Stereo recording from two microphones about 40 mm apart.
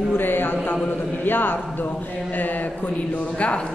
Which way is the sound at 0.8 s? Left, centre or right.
Left.